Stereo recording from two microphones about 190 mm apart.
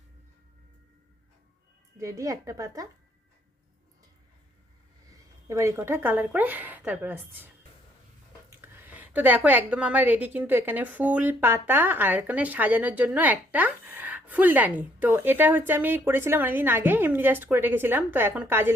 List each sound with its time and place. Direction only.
2.0 s a woman's voice: 15° right (ahead or behind)
5.5 s a woman's voice: 15° right (ahead or behind)